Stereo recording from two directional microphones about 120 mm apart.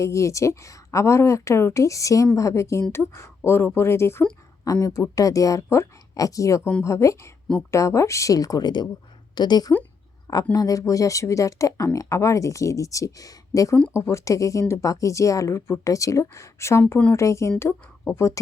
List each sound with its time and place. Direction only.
0.0 s speech: 25° left (ahead or behind)